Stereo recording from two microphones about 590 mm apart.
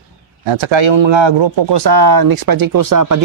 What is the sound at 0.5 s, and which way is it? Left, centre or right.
Speech, right.